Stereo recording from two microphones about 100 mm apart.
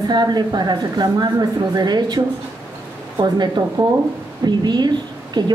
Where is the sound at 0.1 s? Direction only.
45° right (ahead or behind).